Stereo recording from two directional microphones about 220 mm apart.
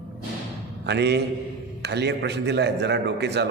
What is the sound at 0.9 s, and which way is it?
A man's voice, 50° right (ahead or behind).